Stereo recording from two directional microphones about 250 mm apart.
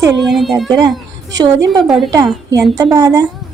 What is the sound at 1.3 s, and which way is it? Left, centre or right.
A woman's voice, centre.